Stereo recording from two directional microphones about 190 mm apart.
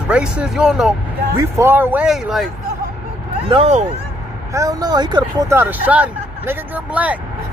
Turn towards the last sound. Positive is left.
turn(degrees=-10)  # may be behind; listen again after turning